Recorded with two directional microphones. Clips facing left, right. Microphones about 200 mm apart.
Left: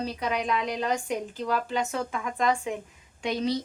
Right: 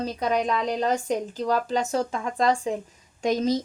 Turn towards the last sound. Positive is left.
turn(degrees=-40)  # may be behind; listen again after turning